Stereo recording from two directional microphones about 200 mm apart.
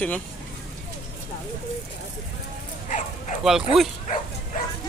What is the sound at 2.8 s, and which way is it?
Dog, 40° left (ahead or behind).